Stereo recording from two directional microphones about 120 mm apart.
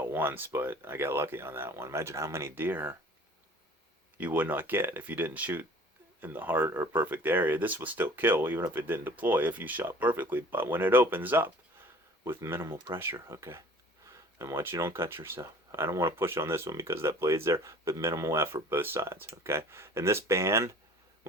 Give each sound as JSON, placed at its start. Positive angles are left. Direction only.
{"t": 0.0, "sound": "speech", "side_deg": -15}
{"t": 4.2, "sound": "speech", "side_deg": -15}